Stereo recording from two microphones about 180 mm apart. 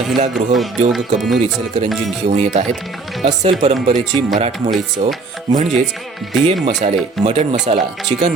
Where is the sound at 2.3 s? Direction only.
40° right (ahead or behind).